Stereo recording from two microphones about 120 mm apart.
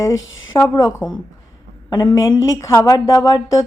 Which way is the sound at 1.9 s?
40° left (ahead or behind).